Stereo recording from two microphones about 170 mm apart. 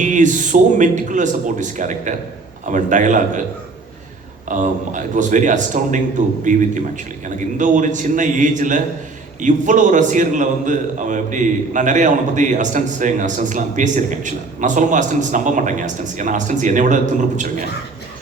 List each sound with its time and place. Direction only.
0.0 s a man's voice: 45° right (ahead or behind)
4.4 s a man's voice: 50° right (ahead or behind)